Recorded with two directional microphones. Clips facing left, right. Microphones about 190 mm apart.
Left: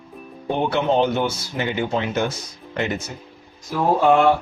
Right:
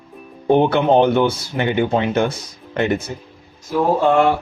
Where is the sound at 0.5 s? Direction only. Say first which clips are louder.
Right 6 dB; 55° right (ahead or behind).